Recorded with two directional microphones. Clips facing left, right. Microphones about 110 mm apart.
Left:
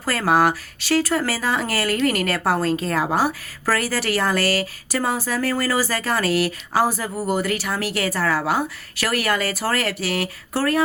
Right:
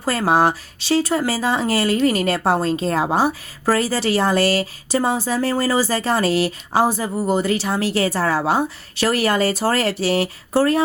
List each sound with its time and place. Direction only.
0.0 s speech: 20° right (ahead or behind)